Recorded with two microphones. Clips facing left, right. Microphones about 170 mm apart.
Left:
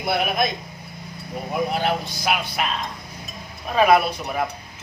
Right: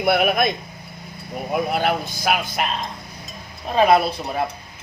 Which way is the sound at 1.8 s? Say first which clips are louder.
Right 2 dB; 50° right (ahead or behind).